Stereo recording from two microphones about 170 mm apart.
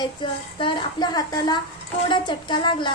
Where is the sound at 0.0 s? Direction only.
30° left (ahead or behind).